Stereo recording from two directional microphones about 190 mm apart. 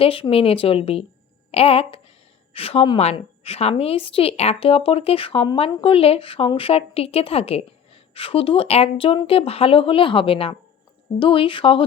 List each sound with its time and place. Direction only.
0.0 s a woman's voice: 30° left (ahead or behind)